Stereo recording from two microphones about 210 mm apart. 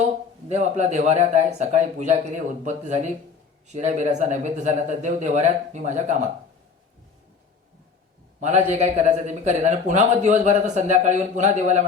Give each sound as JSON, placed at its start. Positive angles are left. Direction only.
{"t": 0.0, "sound": "a man's voice", "side_deg": -35}
{"t": 8.4, "sound": "a man's voice", "side_deg": -35}